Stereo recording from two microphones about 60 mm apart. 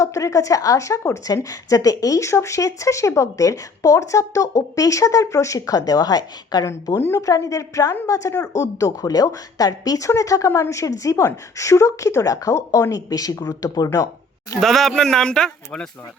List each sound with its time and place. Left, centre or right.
0.0 s a woman's voice: left
6.9 s a woman's voice: left
7.2 s a woman's voice: left
10.1 s speech: left
12.9 s a woman's voice: left
13.5 s a woman's voice: left
14.6 s speech: centre